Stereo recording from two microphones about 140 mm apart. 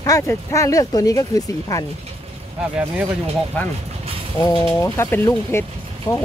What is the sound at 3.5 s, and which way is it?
Speech, 10° left (ahead or behind).